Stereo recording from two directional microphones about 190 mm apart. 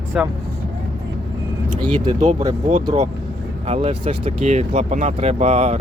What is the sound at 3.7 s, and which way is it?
Speech, 30° right (ahead or behind).